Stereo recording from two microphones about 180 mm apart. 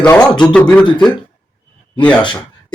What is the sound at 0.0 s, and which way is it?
Speech, 5° left (ahead or behind).